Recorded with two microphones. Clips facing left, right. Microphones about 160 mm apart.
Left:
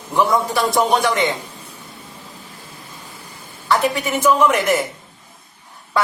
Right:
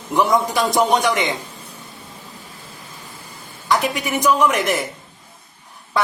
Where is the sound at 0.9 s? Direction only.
20° right (ahead or behind).